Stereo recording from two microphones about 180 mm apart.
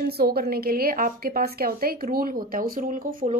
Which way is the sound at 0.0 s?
60° right (ahead or behind).